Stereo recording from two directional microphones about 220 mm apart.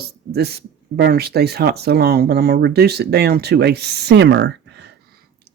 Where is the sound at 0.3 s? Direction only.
45° right (ahead or behind).